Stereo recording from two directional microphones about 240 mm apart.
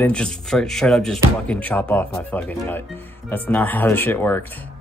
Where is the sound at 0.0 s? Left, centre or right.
Centre.